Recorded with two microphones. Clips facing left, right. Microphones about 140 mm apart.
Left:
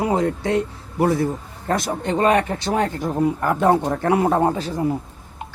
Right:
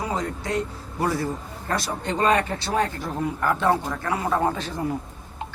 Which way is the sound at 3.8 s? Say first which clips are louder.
Left 8 dB; 45° left (ahead or behind).